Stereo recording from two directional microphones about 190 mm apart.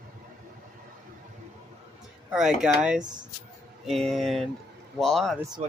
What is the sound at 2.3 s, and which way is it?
Speech, 5° right (ahead or behind).